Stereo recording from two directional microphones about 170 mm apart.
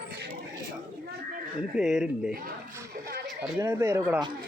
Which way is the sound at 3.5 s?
15° right (ahead or behind).